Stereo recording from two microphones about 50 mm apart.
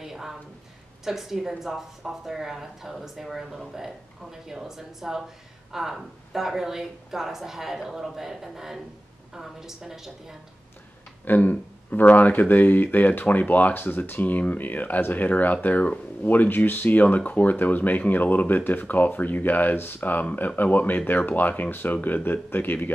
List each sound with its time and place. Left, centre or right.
0.0 s a sound: centre
1.0 s speech: centre
11.2 s speech: left